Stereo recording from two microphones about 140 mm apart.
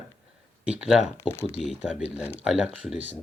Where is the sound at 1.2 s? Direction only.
15° left (ahead or behind).